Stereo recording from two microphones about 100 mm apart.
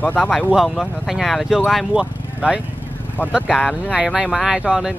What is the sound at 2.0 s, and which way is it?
Speech, 10° right (ahead or behind).